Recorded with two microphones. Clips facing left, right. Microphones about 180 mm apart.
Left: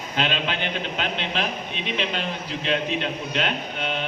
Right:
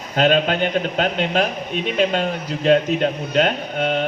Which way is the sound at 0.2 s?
45° right (ahead or behind).